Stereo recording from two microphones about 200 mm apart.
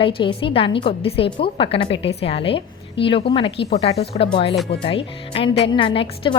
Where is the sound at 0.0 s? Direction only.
25° left (ahead or behind).